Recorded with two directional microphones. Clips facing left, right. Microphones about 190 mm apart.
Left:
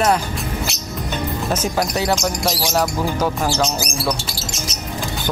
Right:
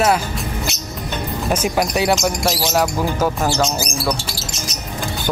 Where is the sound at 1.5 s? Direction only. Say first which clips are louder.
Right 3 dB; 10° right (ahead or behind).